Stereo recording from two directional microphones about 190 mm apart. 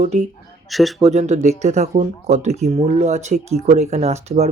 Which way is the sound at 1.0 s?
35° right (ahead or behind).